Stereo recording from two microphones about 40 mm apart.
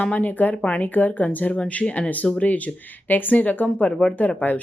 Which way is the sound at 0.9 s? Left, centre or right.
Left.